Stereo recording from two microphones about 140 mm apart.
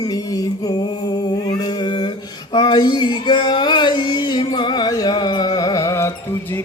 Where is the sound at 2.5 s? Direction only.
30° left (ahead or behind).